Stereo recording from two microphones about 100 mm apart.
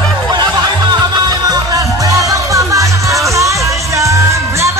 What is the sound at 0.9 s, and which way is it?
Music, 40° right (ahead or behind).